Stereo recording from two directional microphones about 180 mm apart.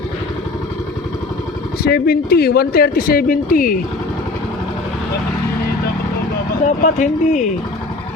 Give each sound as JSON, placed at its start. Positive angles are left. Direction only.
{"t": 1.8, "sound": "a man's voice", "side_deg": 60}
{"t": 6.8, "sound": "speech", "side_deg": 45}